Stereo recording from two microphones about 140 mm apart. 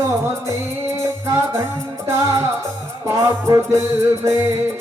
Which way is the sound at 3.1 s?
25° right (ahead or behind).